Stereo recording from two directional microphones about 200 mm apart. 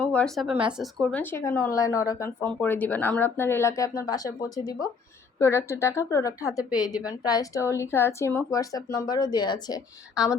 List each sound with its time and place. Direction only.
0.0 s speech: 5° left (ahead or behind)